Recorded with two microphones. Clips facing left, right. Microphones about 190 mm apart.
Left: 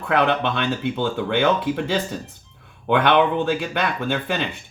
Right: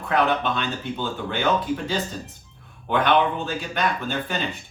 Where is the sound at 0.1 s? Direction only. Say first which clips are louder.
Left 2 dB; 65° left (ahead or behind).